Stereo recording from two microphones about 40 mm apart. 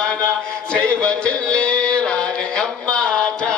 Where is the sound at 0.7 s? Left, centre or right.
Left.